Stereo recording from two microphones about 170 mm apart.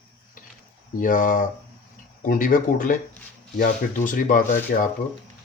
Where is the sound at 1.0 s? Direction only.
50° left (ahead or behind).